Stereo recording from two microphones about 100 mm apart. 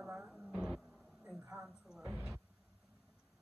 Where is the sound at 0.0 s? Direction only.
5° right (ahead or behind).